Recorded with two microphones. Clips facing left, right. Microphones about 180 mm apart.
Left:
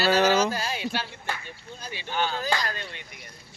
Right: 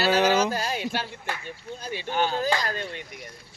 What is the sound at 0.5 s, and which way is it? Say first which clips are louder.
Speech: right 2 dB; 50° right (ahead or behind).